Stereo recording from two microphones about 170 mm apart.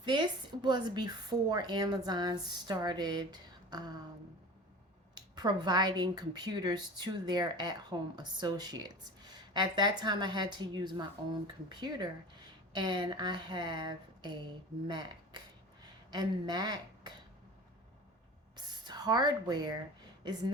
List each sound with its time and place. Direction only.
0.0 s a woman's voice: 25° right (ahead or behind)
5.1 s a woman's voice: 25° right (ahead or behind)
18.5 s a sound: 25° right (ahead or behind)